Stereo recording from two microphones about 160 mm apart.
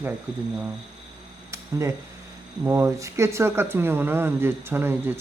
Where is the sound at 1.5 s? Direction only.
20° right (ahead or behind).